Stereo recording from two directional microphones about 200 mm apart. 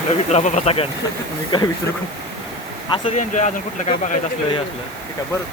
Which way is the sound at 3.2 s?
35° left (ahead or behind).